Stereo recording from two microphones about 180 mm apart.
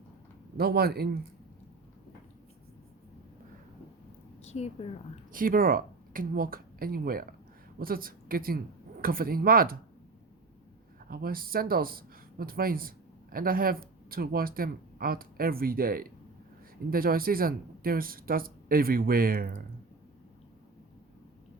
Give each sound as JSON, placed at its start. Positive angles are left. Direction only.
{"t": 0.5, "sound": "speech", "side_deg": -60}
{"t": 4.4, "sound": "a woman's voice", "side_deg": 35}
{"t": 5.3, "sound": "a woman's voice", "side_deg": -50}
{"t": 11.1, "sound": "speech", "side_deg": -55}